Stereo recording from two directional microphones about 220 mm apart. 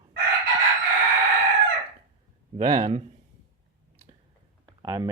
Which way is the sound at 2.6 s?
35° right (ahead or behind).